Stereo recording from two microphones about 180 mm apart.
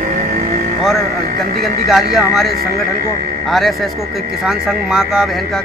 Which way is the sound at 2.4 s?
60° right (ahead or behind).